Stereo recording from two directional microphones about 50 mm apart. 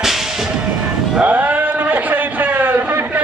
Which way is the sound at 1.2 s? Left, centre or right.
Right.